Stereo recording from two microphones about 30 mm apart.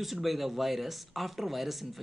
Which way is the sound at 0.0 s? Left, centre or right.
Centre.